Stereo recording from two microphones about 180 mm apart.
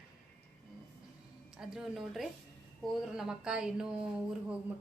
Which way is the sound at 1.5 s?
5° right (ahead or behind).